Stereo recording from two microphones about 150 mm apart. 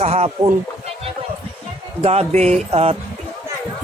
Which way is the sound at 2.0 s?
45° right (ahead or behind).